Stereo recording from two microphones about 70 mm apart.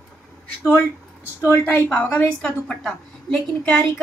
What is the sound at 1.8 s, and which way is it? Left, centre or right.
Speech, left.